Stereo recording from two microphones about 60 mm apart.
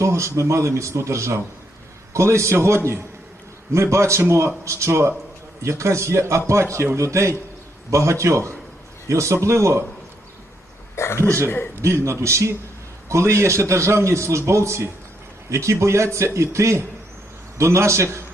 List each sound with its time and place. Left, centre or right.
0.0 s a man's voice: right
10.9 s throat clearing: left
11.4 s a man's voice: left
11.8 s a man's voice: right